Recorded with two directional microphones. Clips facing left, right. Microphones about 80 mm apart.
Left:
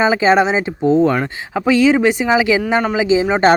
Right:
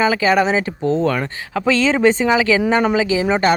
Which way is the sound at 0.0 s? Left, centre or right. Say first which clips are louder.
Left 2 dB; left.